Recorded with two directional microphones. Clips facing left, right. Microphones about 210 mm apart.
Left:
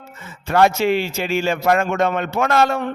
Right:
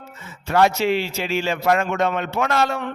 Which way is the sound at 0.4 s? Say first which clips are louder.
Left 2 dB; 50° left (ahead or behind).